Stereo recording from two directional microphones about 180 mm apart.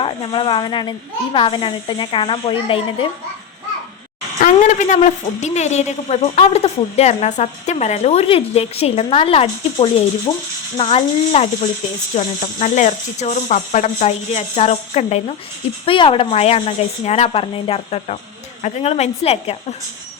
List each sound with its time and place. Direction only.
0.0 s speech: 30° left (ahead or behind)
4.4 s a woman's voice: 45° left (ahead or behind)